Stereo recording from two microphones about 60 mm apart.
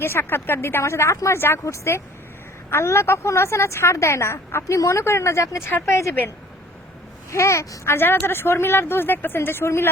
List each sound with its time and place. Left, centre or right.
0.0 s a woman's voice: left
1.4 s a woman's voice: left
7.3 s speech: left
7.9 s a woman's voice: left